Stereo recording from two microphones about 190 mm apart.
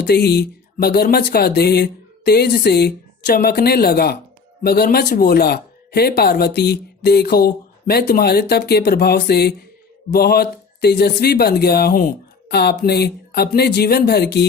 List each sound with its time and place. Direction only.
0.0 s speech: 60° left (ahead or behind)